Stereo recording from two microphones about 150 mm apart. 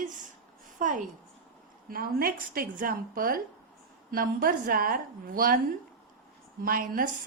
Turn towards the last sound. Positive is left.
turn(degrees=-70)  # may be behind; listen again after turning